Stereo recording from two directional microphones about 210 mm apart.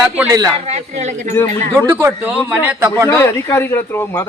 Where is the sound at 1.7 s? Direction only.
15° right (ahead or behind).